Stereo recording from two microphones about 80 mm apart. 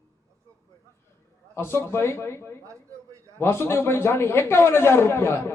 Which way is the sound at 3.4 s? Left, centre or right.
Left.